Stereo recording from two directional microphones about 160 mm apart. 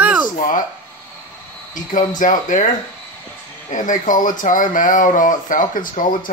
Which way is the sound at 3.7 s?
55° left (ahead or behind).